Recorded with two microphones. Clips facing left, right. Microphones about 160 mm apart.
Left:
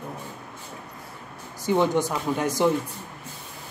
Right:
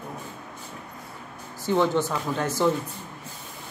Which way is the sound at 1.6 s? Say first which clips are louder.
Left 1 dB; 15° left (ahead or behind).